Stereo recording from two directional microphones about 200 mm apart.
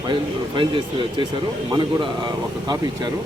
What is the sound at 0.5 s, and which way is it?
A man's voice, 25° right (ahead or behind).